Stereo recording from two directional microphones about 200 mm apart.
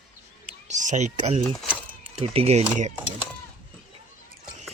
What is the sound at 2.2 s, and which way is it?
Speech, 30° right (ahead or behind).